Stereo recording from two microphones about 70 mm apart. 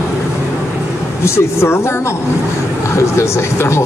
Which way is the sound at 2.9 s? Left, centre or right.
Left.